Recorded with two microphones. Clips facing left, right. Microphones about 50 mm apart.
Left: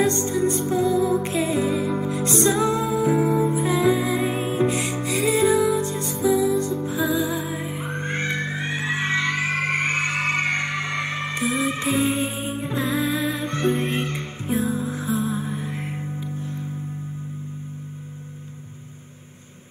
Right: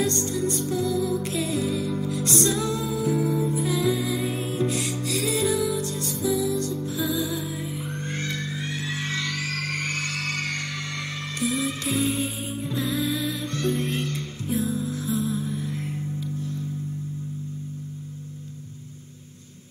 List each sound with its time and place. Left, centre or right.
0.0 s music: left